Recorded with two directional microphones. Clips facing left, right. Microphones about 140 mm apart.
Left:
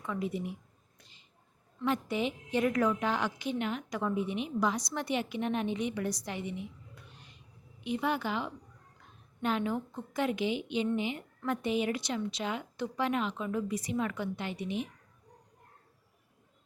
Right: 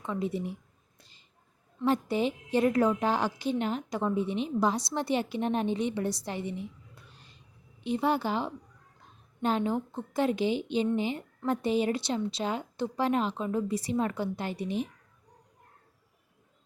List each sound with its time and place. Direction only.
0.0 s speech: 30° right (ahead or behind)
1.8 s a woman's voice: 35° right (ahead or behind)